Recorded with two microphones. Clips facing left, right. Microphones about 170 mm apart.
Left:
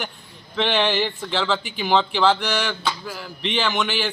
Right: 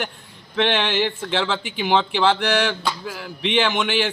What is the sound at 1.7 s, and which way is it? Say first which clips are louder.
Speech: even; 20° right (ahead or behind).